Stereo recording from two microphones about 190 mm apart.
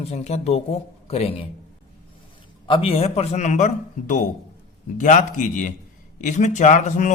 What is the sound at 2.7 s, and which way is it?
A man's voice, 30° left (ahead or behind).